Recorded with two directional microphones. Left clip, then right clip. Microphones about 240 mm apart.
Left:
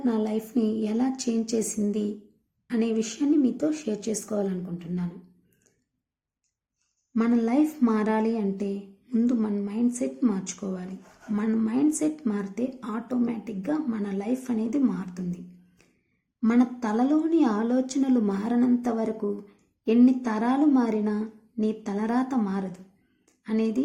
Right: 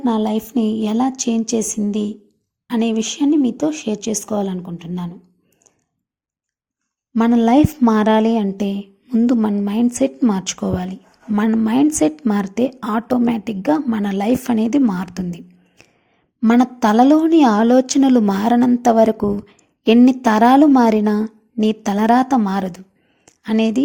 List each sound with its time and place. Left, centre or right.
0.0 s a woman's voice: right
7.1 s a woman's voice: right
16.4 s a woman's voice: right
23.2 s a sound: right